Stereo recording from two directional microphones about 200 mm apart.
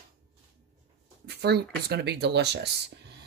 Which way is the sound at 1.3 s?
55° right (ahead or behind).